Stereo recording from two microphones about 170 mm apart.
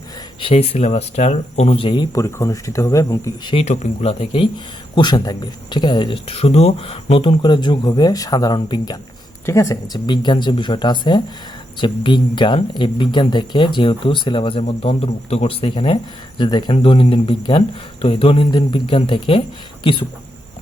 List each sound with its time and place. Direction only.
0.3 s speech: 35° left (ahead or behind)
3.5 s speech: 40° left (ahead or behind)